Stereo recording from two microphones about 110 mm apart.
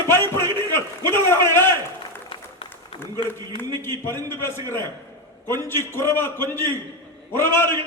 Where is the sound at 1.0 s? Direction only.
20° left (ahead or behind).